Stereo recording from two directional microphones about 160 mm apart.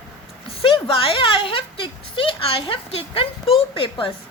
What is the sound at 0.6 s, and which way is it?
Speech, 35° left (ahead or behind).